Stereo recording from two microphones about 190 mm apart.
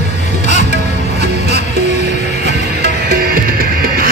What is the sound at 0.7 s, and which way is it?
Music, 60° right (ahead or behind).